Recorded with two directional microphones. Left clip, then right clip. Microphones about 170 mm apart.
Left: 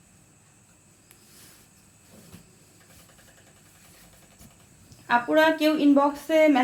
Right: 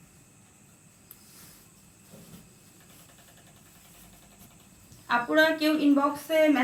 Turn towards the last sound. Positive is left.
turn(degrees=55)  # may be behind; listen again after turning